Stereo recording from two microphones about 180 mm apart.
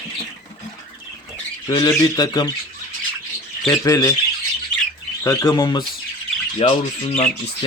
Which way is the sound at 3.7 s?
20° left (ahead or behind).